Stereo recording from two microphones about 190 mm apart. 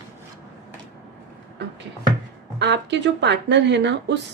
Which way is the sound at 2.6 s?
65° right (ahead or behind).